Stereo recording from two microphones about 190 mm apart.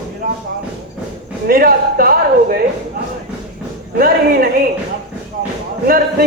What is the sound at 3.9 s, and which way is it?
Speech, 50° right (ahead or behind).